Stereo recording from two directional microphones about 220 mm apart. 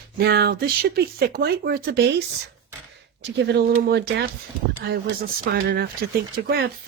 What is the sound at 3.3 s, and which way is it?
Speech, 45° right (ahead or behind).